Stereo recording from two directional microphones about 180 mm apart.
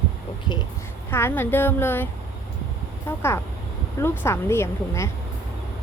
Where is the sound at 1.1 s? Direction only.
10° left (ahead or behind).